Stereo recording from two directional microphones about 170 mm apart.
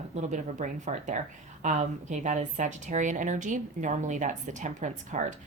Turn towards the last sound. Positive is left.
turn(degrees=-45)  # may be behind; listen again after turning